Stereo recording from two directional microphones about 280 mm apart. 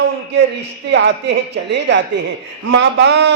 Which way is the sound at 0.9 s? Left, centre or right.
Right.